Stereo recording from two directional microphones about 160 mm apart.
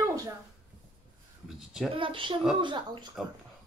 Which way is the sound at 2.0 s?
30° right (ahead or behind).